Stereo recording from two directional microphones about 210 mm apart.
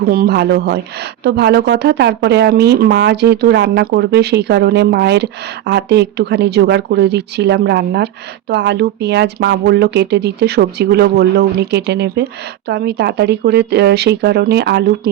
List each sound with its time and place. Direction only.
0.1 s speech: 45° right (ahead or behind)